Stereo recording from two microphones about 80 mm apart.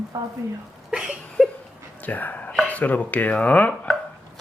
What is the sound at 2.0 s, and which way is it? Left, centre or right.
Speech, left.